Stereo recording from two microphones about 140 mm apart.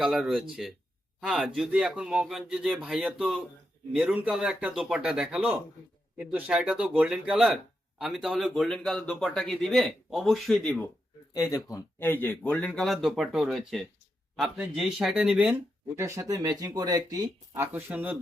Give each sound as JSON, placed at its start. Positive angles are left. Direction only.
{"t": 0.0, "sound": "speech", "side_deg": 0}
{"t": 11.5, "sound": "speech", "side_deg": 20}
{"t": 16.0, "sound": "speech", "side_deg": -20}